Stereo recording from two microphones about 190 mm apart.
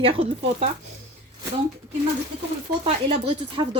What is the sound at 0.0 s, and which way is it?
Speech, 30° right (ahead or behind).